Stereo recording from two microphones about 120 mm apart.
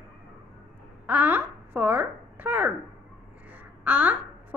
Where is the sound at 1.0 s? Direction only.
15° right (ahead or behind).